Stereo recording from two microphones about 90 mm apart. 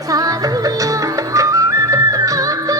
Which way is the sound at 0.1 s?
45° right (ahead or behind).